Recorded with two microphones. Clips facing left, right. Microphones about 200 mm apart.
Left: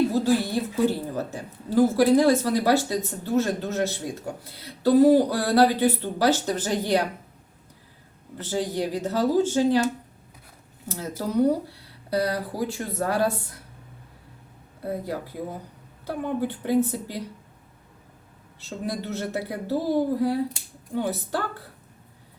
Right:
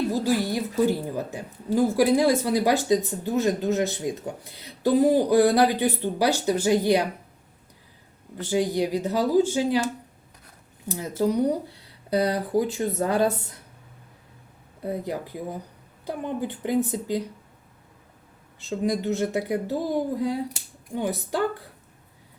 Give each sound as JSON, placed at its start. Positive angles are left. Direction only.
{"t": 0.1, "sound": "a woman's voice", "side_deg": -10}
{"t": 8.4, "sound": "speech", "side_deg": -15}
{"t": 10.8, "sound": "speech", "side_deg": -15}
{"t": 16.0, "sound": "speech", "side_deg": -15}
{"t": 18.9, "sound": "speech", "side_deg": -15}